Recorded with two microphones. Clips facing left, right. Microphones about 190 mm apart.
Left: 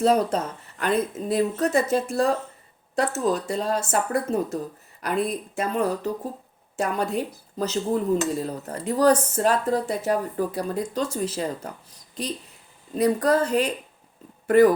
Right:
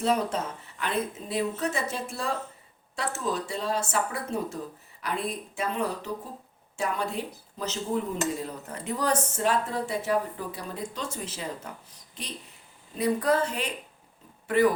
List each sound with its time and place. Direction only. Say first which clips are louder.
0.0 s speech: left 6 dB; 40° left (ahead or behind)
12.9 s speech: left 4 dB; 40° left (ahead or behind)